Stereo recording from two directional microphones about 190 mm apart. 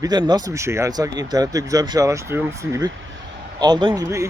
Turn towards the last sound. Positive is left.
turn(degrees=-15)  # may be behind; listen again after turning